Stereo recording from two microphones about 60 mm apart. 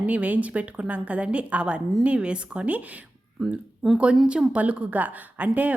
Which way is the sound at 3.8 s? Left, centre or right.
Centre.